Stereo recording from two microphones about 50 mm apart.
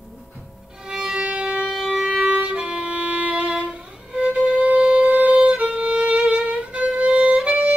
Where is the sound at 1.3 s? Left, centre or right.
Centre.